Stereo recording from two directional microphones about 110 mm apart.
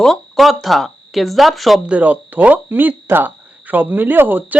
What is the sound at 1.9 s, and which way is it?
Speech, 15° right (ahead or behind).